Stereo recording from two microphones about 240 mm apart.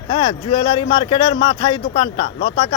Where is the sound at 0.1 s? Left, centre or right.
Centre.